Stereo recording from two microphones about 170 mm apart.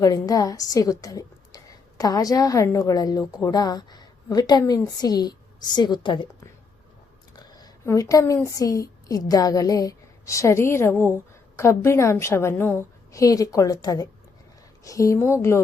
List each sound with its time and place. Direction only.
0.0 s a woman's voice: 20° left (ahead or behind)
7.3 s a woman's voice: 25° left (ahead or behind)